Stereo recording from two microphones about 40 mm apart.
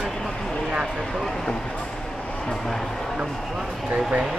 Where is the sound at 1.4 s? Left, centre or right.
Left.